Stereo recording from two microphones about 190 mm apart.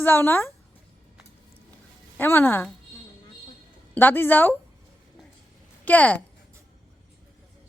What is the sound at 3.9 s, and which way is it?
Speech, 10° left (ahead or behind).